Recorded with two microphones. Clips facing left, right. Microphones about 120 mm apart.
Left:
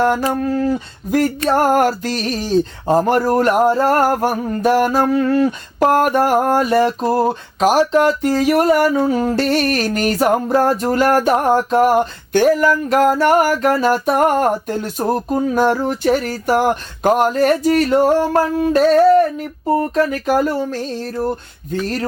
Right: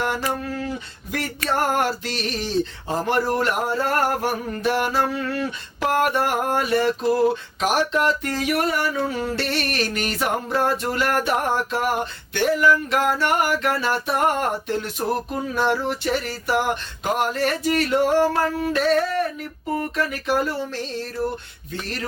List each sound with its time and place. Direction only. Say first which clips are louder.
0.0 s speech: left 8 dB; 40° left (ahead or behind)
1.5 s a sound: left 6 dB; 40° left (ahead or behind)
19.6 s speech: left 9 dB; 35° left (ahead or behind)